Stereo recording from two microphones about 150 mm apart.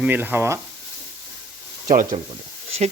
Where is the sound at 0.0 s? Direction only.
10° right (ahead or behind).